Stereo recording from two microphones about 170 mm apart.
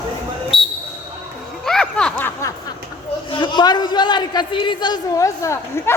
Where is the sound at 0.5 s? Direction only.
35° left (ahead or behind).